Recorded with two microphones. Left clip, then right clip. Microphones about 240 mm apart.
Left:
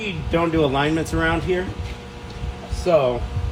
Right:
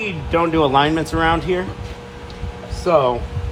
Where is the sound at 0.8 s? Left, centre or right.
Centre.